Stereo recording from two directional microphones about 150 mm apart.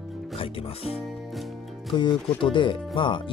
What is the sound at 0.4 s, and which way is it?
Speech, 40° left (ahead or behind).